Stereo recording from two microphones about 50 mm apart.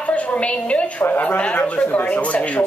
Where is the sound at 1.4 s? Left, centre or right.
Left.